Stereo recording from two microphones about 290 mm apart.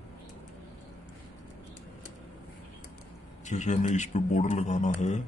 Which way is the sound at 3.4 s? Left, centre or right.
Left.